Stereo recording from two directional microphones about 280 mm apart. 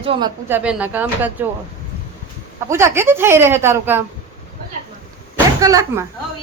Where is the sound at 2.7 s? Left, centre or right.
Centre.